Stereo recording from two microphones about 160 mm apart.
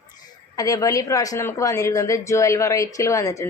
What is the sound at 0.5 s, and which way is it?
Speech, 25° left (ahead or behind).